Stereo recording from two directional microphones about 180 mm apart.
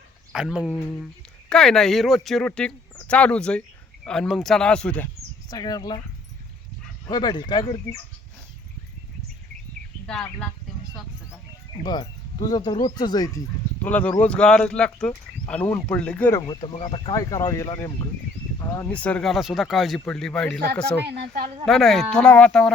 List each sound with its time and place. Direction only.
0.3 s speech: 5° right (ahead or behind)
5.5 s speech: 20° left (ahead or behind)
7.1 s speech: 25° left (ahead or behind)
10.1 s speech: 5° left (ahead or behind)
11.9 s speech: 25° left (ahead or behind)
13.8 s speech: 10° left (ahead or behind)
16.5 s speech: 25° left (ahead or behind)
18.9 s speech: 5° left (ahead or behind)
21.1 s speech: 60° right (ahead or behind)
21.7 s speech: centre (ahead or behind)